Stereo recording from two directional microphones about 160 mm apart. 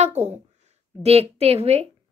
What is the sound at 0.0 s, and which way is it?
A woman's voice, 45° right (ahead or behind).